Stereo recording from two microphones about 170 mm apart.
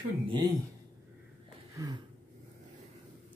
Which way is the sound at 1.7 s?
20° right (ahead or behind).